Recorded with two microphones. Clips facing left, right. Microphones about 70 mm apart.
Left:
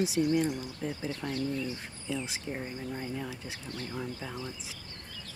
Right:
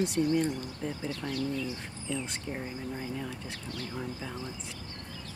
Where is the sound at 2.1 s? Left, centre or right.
Centre.